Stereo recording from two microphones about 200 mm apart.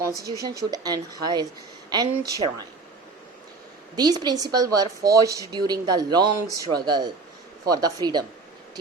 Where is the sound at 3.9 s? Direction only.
20° right (ahead or behind).